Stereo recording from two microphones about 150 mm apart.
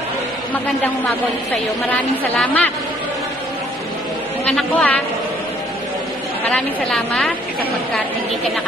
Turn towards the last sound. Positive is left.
turn(degrees=5)  # may be behind; listen again after turning